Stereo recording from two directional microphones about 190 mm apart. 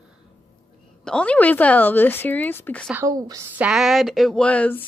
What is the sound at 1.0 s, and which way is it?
Speech, 5° left (ahead or behind).